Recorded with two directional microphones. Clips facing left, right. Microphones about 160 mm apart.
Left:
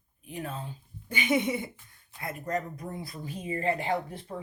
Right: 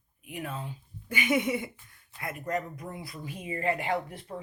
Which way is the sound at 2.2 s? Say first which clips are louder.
Even; 40° left (ahead or behind).